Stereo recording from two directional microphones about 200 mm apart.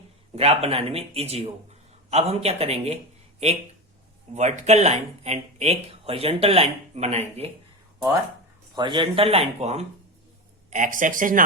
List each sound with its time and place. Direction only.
0.3 s speech: 30° right (ahead or behind)
4.4 s speech: 35° right (ahead or behind)
8.7 s speech: 25° right (ahead or behind); by 11.4 s 40° right (ahead or behind)